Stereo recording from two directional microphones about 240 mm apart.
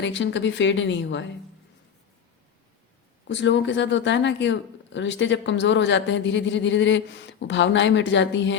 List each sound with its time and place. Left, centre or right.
0.0 s speech: left
3.2 s speech: left